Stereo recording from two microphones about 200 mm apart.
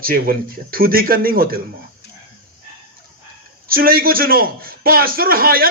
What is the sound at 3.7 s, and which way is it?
A man's voice, 45° right (ahead or behind).